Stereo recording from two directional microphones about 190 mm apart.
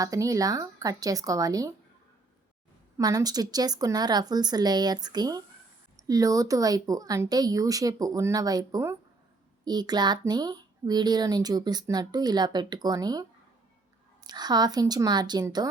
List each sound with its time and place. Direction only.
0.0 s speech: 15° right (ahead or behind)
3.0 s speech: 20° right (ahead or behind)
14.3 s speech: 20° right (ahead or behind)